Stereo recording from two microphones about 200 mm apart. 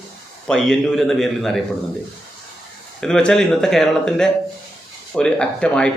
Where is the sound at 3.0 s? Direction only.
5° left (ahead or behind).